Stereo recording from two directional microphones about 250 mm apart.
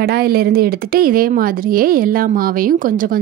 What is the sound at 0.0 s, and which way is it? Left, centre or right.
Speech, right.